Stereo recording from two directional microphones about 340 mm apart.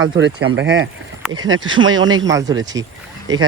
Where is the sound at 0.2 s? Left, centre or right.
Right.